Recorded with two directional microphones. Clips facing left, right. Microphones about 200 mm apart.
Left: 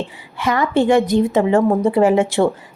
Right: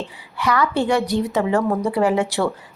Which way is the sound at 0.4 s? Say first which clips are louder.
Left 4 dB; 20° left (ahead or behind).